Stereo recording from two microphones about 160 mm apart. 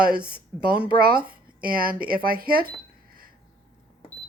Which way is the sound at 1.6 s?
65° right (ahead or behind).